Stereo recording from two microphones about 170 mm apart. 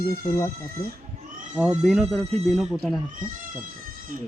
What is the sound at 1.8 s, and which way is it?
Speech, centre (ahead or behind).